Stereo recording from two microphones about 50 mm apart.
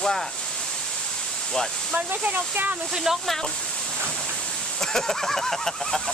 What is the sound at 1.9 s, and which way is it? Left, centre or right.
Speech, right.